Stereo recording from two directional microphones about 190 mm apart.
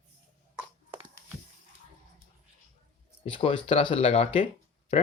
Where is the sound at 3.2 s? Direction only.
30° left (ahead or behind).